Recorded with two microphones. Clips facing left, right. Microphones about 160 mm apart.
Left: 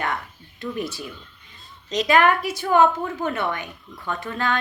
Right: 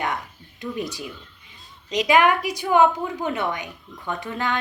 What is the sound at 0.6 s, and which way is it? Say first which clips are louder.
A woman's voice: even; 15° right (ahead or behind).